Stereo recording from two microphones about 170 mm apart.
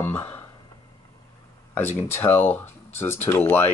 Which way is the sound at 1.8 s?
15° left (ahead or behind).